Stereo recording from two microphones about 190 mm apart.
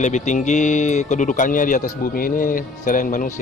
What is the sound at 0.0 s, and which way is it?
Speech, 40° left (ahead or behind).